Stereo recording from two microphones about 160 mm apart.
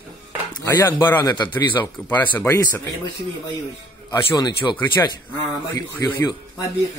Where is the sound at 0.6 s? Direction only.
15° left (ahead or behind).